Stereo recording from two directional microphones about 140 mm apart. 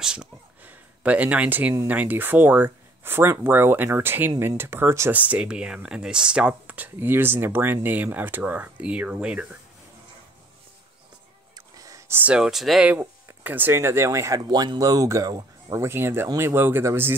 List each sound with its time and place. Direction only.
0.0 s a sound: 5° right (ahead or behind)
1.9 s speech: 10° right (ahead or behind)
11.5 s gasp: 25° right (ahead or behind)
12.3 s speech: 5° right (ahead or behind)